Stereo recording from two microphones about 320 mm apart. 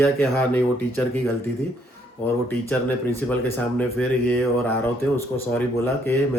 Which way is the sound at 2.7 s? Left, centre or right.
Centre.